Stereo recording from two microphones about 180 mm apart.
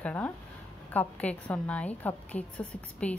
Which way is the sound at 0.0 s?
5° left (ahead or behind).